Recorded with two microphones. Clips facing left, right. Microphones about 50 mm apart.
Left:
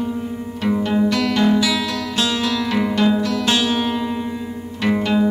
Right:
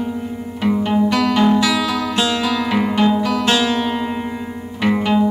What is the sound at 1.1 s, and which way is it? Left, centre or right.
Music, centre.